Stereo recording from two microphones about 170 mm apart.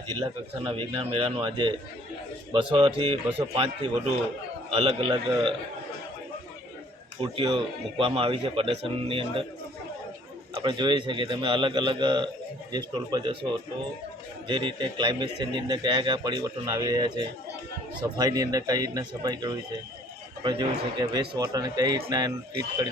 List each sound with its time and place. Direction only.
0.6 s speech: 30° right (ahead or behind)
3.2 s speech: 10° right (ahead or behind)
3.6 s speech: 30° right (ahead or behind)
7.2 s speech: 30° right (ahead or behind)
10.6 s speech: 25° right (ahead or behind)